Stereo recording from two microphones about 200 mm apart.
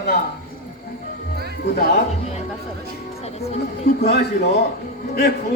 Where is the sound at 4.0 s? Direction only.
55° left (ahead or behind).